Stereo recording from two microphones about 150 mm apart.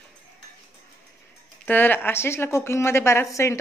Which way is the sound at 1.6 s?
10° left (ahead or behind).